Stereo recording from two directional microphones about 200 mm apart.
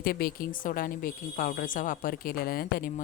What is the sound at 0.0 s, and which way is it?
Speech, 50° left (ahead or behind).